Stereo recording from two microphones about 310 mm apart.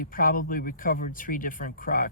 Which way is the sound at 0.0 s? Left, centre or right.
Left.